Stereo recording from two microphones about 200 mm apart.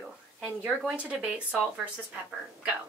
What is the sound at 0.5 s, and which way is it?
Speech, 10° right (ahead or behind).